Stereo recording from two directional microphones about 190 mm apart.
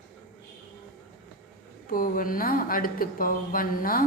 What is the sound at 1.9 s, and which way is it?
Speech, 50° left (ahead or behind).